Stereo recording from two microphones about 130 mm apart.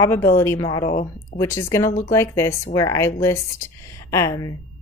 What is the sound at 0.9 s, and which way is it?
Speech, 80° left.